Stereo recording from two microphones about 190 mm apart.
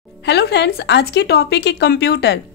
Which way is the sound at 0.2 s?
65° left (ahead or behind).